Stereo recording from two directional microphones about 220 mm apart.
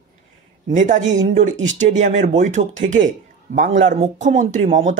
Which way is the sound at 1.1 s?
35° right (ahead or behind).